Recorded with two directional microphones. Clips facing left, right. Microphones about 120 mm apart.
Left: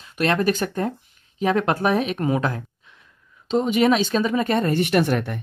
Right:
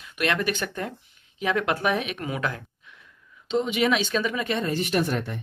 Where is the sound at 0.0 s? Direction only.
35° left (ahead or behind).